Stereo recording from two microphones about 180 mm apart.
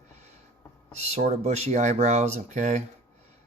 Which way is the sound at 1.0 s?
35° right (ahead or behind).